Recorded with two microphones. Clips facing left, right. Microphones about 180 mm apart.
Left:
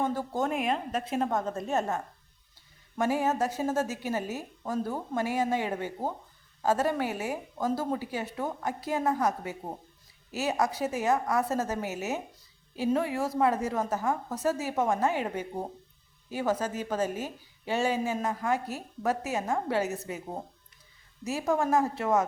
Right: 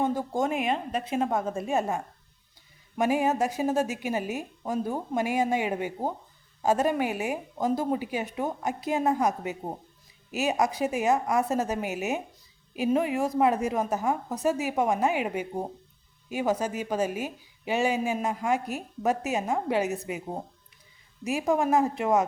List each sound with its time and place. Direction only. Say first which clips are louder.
0.0 s a woman's voice: right 3 dB; 15° right (ahead or behind)
3.0 s a woman's voice: right 2 dB; 15° right (ahead or behind)